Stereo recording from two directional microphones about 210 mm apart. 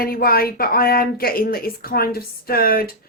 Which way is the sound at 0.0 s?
45° left (ahead or behind).